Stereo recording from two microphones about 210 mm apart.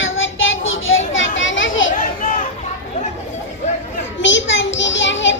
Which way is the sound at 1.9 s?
40° left (ahead or behind).